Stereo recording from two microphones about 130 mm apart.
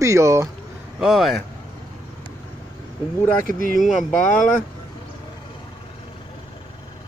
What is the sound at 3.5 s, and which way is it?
Speech, 90° right.